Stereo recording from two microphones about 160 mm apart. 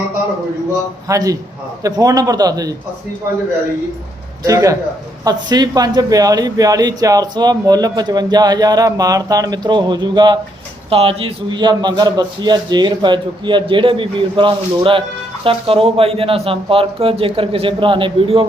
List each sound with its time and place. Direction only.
1.0 s speech: 20° right (ahead or behind)
4.4 s speech: 20° right (ahead or behind)
10.8 s speech: 40° right (ahead or behind)